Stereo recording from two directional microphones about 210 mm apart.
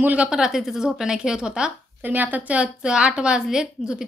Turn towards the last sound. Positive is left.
turn(degrees=-5)  # may be behind; listen again after turning